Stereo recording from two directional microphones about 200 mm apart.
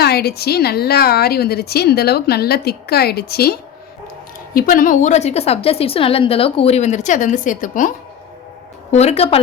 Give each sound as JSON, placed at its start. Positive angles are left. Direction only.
{"t": 0.0, "sound": "a woman's voice", "side_deg": 55}